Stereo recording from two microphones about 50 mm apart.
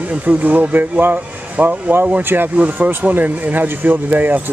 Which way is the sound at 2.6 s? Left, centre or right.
Right.